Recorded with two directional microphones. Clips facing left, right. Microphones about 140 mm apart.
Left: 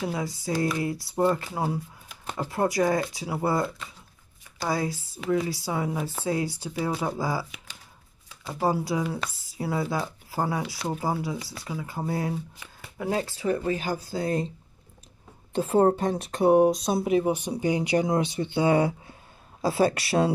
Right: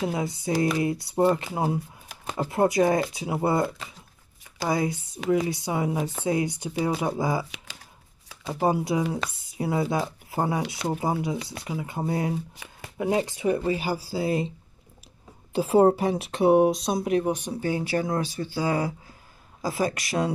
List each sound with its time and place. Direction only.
0.0 s speech: 20° right (ahead or behind)
8.5 s speech: 20° right (ahead or behind)
13.7 s speech: 10° right (ahead or behind)
15.5 s speech: 10° right (ahead or behind); by 20.3 s 30° left (ahead or behind)